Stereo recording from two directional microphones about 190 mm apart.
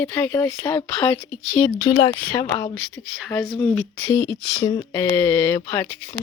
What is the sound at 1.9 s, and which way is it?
Speech, 20° left (ahead or behind).